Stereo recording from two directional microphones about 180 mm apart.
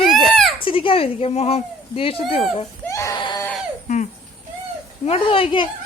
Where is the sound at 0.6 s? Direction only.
30° left (ahead or behind).